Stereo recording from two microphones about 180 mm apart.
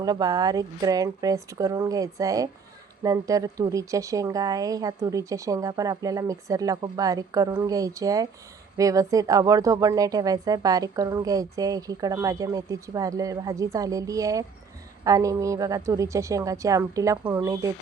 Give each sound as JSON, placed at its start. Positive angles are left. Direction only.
{"t": 0.0, "sound": "a woman's voice", "side_deg": -20}